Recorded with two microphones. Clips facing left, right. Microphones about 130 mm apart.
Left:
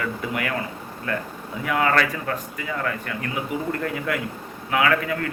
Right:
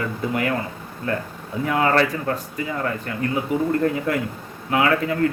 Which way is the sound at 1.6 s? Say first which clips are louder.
Right 2 dB; 30° right (ahead or behind).